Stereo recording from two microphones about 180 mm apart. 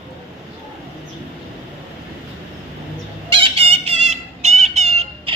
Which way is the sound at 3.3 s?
30° right (ahead or behind).